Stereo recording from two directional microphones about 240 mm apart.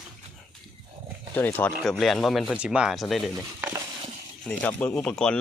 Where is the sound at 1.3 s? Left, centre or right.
Centre.